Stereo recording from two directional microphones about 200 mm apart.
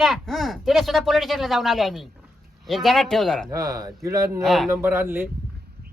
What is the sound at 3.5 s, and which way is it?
Speech, 15° right (ahead or behind).